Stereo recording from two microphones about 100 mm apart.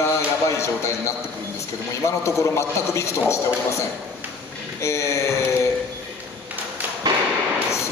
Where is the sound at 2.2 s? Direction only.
30° left (ahead or behind).